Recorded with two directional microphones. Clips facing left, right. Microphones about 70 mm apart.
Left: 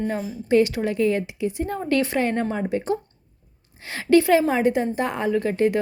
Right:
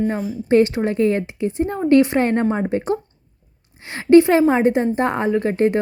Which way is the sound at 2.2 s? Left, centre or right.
Right.